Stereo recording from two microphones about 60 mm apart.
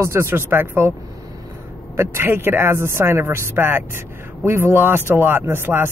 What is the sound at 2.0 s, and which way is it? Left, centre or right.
Speech, right.